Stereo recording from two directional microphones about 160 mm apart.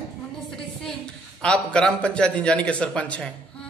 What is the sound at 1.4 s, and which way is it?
A man's voice, 5° left (ahead or behind).